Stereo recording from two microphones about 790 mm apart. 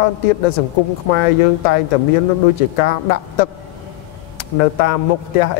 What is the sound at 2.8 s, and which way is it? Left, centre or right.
Speech, left.